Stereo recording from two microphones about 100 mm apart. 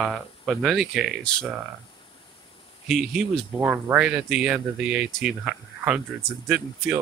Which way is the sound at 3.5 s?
20° right (ahead or behind).